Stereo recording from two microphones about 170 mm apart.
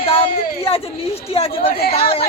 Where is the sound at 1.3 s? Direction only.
35° left (ahead or behind).